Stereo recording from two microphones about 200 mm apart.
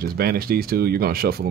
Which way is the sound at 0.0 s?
50° right (ahead or behind).